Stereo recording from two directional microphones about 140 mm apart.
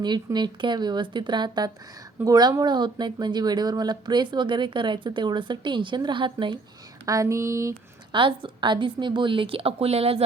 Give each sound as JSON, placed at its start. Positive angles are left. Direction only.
{"t": 0.3, "sound": "speech", "side_deg": -30}
{"t": 7.0, "sound": "a sound", "side_deg": -25}
{"t": 8.1, "sound": "speech", "side_deg": -35}